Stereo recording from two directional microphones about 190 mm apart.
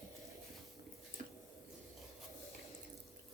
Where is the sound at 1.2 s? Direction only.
40° right (ahead or behind).